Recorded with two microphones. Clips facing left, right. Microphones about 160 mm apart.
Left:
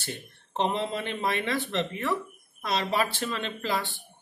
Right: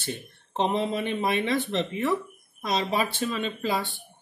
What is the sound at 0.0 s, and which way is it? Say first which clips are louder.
Speech: right 4 dB; 15° right (ahead or behind).